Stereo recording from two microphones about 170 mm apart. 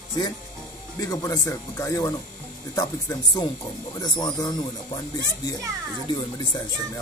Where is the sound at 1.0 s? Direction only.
20° left (ahead or behind).